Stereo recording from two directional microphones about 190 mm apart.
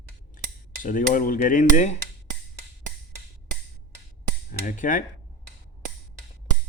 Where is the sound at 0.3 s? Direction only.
45° left (ahead or behind).